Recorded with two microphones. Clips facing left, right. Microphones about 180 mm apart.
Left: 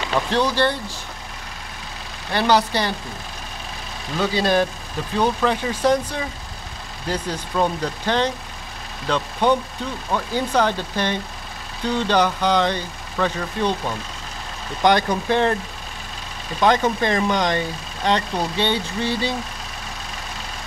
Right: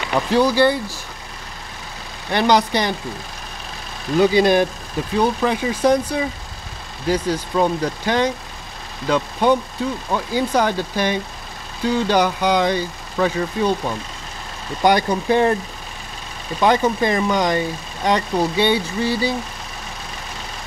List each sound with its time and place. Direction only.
0.1 s speech: 10° right (ahead or behind)
2.3 s speech: 15° right (ahead or behind)
4.2 s speech: 15° right (ahead or behind)
16.5 s speech: 10° right (ahead or behind)